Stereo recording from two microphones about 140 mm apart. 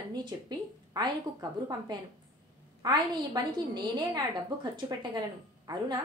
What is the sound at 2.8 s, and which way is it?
A woman's voice, 30° right (ahead or behind).